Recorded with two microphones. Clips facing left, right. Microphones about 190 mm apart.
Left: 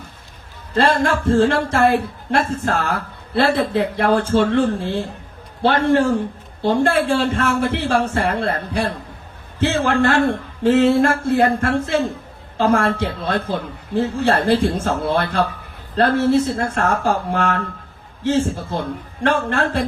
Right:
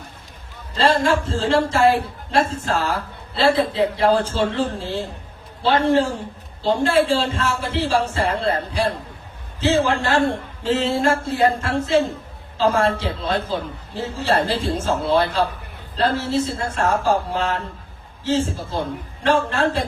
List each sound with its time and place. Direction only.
0.7 s a man's voice: 55° left (ahead or behind)